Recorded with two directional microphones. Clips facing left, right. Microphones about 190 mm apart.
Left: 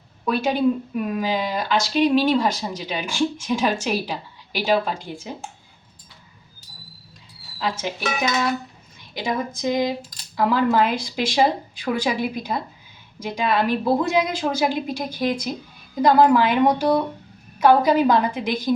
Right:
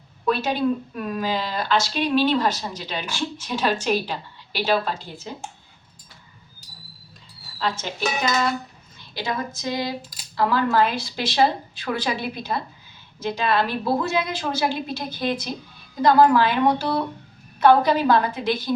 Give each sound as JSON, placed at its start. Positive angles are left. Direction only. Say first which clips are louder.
{"t": 0.3, "sound": "speech", "louder": "left 2 dB", "side_deg": 10}
{"t": 7.6, "sound": "speech", "louder": "even", "side_deg": 10}
{"t": 9.0, "sound": "a sound", "louder": "left 2 dB", "side_deg": 15}
{"t": 9.6, "sound": "speech", "louder": "left 5 dB", "side_deg": 15}